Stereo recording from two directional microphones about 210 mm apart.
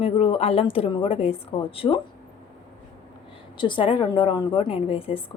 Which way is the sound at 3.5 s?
25° left (ahead or behind).